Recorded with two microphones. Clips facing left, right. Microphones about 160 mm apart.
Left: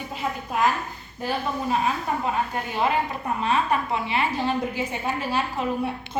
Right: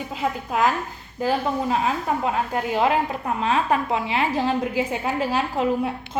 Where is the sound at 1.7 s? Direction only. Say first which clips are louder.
Right 2 dB; 90° right.